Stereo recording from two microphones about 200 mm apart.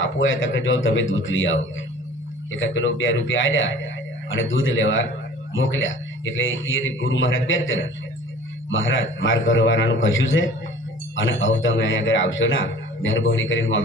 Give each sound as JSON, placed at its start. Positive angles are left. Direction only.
{"t": 0.0, "sound": "speech", "side_deg": 70}